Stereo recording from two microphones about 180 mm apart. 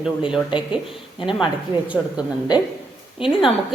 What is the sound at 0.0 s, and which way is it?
Speech, 5° right (ahead or behind).